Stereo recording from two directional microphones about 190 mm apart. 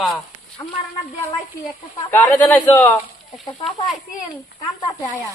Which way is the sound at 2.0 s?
10° left (ahead or behind).